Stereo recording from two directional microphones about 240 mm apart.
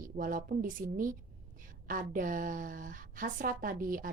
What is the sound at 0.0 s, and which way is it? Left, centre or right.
A woman's voice, right.